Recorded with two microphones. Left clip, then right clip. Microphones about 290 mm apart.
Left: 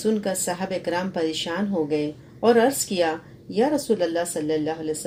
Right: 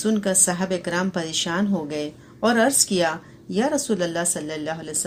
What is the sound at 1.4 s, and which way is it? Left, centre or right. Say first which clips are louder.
Speech: right 1 dB; right.